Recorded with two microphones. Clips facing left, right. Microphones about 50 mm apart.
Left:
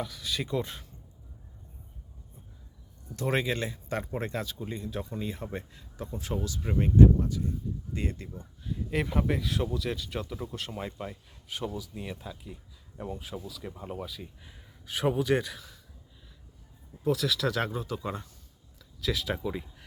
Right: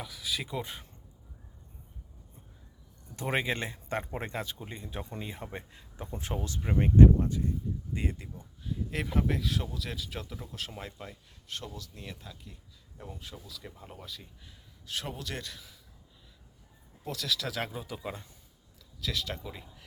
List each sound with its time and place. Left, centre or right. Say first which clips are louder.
0.0 s speech: left 3 dB; centre
3.2 s speech: left 2 dB; right
6.6 s speech: right 2 dB; centre
6.9 s speech: even; right
7.9 s speech: left 2 dB; centre
8.6 s speech: left 4 dB; centre
15.5 s speech: left 4 dB; centre
17.0 s speech: left 7 dB; centre
19.0 s speech: left 5 dB; centre